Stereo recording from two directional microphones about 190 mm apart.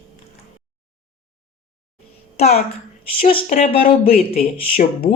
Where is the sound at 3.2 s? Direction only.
30° left (ahead or behind).